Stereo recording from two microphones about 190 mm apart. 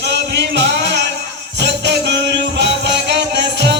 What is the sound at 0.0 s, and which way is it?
Music, 65° right (ahead or behind).